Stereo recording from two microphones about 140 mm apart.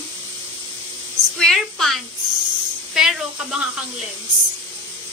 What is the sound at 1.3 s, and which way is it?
Speech, 5° left (ahead or behind).